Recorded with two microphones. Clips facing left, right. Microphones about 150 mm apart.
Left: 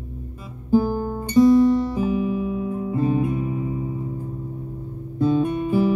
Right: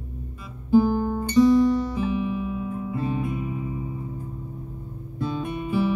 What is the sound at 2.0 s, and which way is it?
Music, 40° left (ahead or behind).